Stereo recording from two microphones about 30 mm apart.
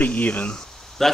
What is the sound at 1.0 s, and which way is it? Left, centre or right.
Speech, centre.